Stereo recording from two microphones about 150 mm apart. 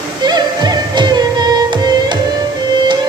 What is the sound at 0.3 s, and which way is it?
Music, 30° right (ahead or behind).